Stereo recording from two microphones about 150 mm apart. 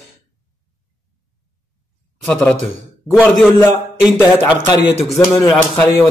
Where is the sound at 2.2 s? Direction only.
5° left (ahead or behind).